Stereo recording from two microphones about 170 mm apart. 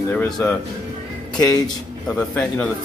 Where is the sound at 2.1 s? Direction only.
5° left (ahead or behind).